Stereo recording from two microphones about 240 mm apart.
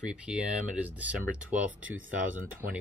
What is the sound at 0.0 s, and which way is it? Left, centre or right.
Speech, centre.